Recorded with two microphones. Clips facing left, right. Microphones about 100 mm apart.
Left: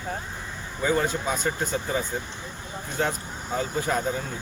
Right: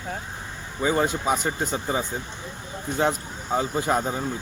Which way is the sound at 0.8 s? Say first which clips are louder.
Right 1 dB; 15° right (ahead or behind).